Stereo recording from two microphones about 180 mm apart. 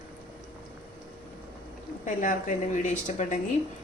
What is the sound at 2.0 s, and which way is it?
A woman's voice, 45° left (ahead or behind).